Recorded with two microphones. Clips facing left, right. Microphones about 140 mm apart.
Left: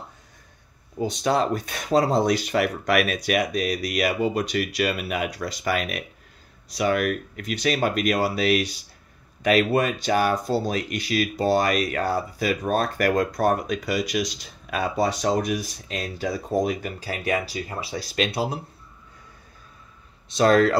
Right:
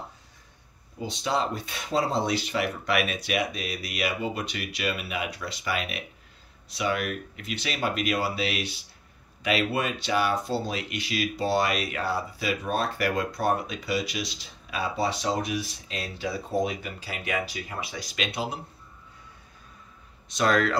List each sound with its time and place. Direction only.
1.2 s speech: 50° left (ahead or behind); by 18.6 s 35° left (ahead or behind)
20.3 s speech: 35° left (ahead or behind)